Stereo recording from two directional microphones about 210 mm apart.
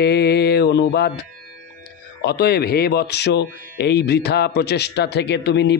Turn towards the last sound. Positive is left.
turn(degrees=55)  # may be behind; listen again after turning